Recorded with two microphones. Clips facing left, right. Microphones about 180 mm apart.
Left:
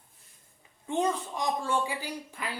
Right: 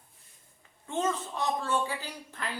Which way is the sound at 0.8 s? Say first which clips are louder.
Left 2 dB; 15° left (ahead or behind).